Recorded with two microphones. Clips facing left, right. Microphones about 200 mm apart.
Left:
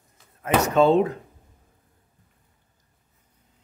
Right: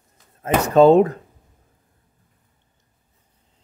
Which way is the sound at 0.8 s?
45° right (ahead or behind).